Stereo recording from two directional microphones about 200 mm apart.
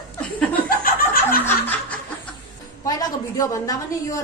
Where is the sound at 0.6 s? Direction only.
45° left (ahead or behind).